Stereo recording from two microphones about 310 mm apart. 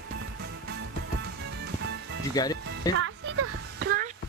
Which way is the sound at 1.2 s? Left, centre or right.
Right.